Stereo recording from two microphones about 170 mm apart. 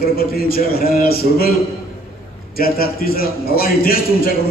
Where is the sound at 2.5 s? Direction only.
60° left (ahead or behind).